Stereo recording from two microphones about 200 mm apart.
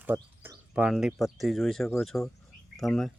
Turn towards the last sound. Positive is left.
turn(degrees=0)  # may be behind; listen again after turning